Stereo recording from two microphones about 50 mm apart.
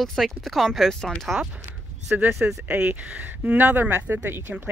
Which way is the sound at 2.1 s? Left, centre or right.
Right.